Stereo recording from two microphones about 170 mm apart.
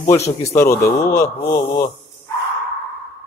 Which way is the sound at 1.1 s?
20° left (ahead or behind).